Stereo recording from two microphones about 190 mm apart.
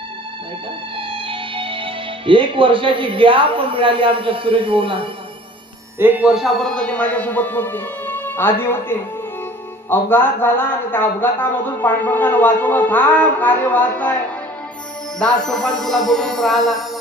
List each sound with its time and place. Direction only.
0.9 s speech: 30° right (ahead or behind)
6.0 s a man's voice: 10° right (ahead or behind); by 14.2 s 10° left (ahead or behind)
15.4 s music: 5° left (ahead or behind)